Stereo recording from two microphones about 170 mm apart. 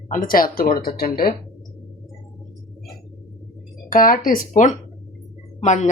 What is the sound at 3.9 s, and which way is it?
A woman's voice, 55° left (ahead or behind).